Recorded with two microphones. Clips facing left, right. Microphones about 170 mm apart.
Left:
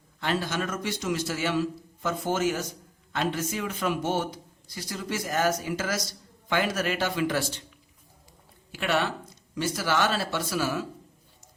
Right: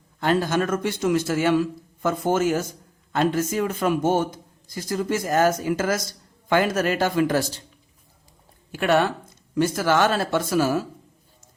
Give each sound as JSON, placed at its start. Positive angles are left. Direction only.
{"t": 0.2, "sound": "a man's voice", "side_deg": -45}
{"t": 8.7, "sound": "a man's voice", "side_deg": -50}